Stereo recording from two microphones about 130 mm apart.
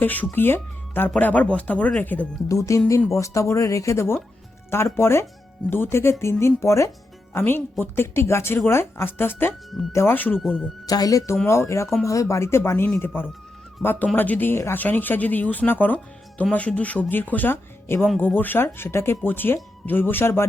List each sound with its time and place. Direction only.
0.0 s speech: 15° left (ahead or behind)
2.5 s speech: 25° left (ahead or behind)
10.3 s speech: 5° right (ahead or behind)
10.8 s speech: 30° left (ahead or behind)